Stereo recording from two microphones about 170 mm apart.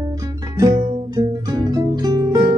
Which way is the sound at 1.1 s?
20° right (ahead or behind).